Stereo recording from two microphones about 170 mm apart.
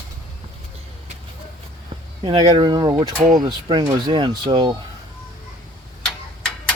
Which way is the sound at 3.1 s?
50° right (ahead or behind).